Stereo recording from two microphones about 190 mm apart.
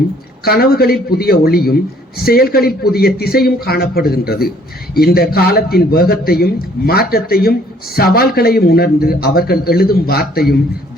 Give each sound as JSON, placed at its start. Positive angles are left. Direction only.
{"t": 0.4, "sound": "a man's voice", "side_deg": 55}